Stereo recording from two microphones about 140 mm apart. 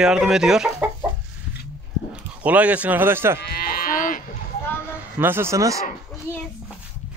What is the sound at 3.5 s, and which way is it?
Moo, 90° left.